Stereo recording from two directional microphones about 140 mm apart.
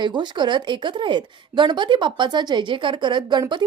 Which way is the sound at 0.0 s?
35° right (ahead or behind).